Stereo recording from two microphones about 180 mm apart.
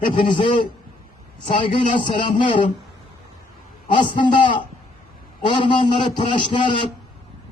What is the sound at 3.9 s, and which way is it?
A man's voice, 25° left (ahead or behind).